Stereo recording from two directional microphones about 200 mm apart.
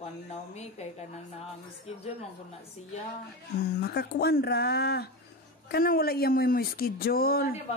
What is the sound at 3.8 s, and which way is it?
A woman's voice, 50° left (ahead or behind).